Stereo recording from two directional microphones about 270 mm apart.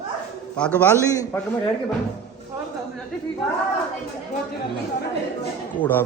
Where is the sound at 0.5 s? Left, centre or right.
Centre.